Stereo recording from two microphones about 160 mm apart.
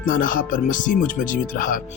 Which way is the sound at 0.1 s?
60° left (ahead or behind).